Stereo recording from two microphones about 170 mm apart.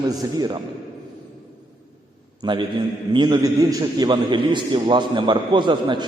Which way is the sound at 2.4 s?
25° right (ahead or behind).